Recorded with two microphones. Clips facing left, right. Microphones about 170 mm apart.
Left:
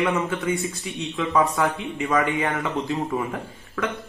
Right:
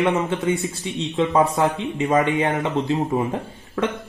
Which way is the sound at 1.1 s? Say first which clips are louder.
Right 3 dB; 35° right (ahead or behind).